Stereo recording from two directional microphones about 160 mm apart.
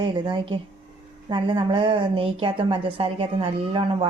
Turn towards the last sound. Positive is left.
turn(degrees=-35)  # may be behind; listen again after turning